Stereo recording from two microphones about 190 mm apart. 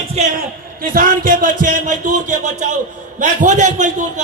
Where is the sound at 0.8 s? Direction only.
45° right (ahead or behind).